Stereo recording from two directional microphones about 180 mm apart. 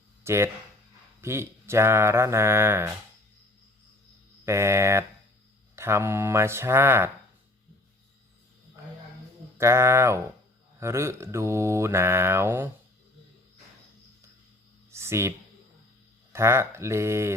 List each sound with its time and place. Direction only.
0.3 s mantra: 15° right (ahead or behind)
4.4 s mantra: 15° right (ahead or behind)
9.6 s mantra: 15° right (ahead or behind)
14.8 s a sound: 15° right (ahead or behind)
16.3 s mantra: 15° right (ahead or behind)